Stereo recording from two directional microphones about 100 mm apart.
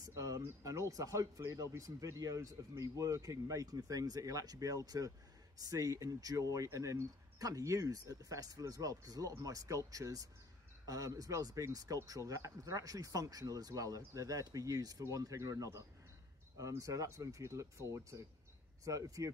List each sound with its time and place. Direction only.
0.0 s speech: 35° right (ahead or behind)